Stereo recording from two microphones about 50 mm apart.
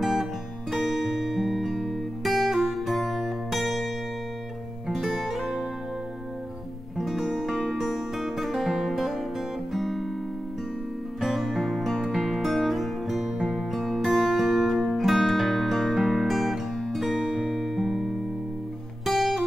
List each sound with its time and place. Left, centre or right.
0.0 s music: centre
7.0 s music: centre
11.1 s music: centre